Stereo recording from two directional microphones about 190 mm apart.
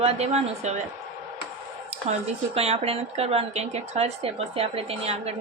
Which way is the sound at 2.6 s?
30° right (ahead or behind).